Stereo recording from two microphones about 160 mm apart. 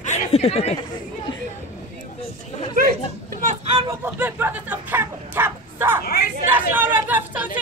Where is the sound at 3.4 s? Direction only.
40° right (ahead or behind).